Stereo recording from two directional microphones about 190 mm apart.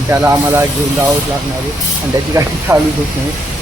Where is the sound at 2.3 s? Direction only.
20° right (ahead or behind).